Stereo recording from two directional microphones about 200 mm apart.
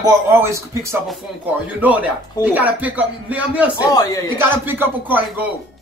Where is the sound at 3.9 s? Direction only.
20° left (ahead or behind).